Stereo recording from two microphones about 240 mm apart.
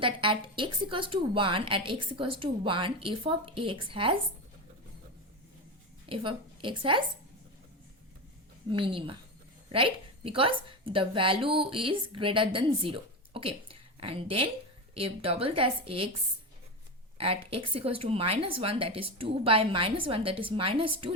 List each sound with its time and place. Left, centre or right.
0.0 s a woman's voice: right
6.1 s a woman's voice: right
8.7 s a woman's voice: right
17.2 s a woman's voice: right